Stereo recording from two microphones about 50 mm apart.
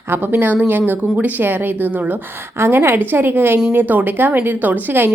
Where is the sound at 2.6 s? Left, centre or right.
Right.